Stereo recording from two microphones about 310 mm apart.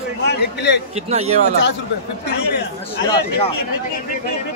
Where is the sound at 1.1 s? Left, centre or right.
Right.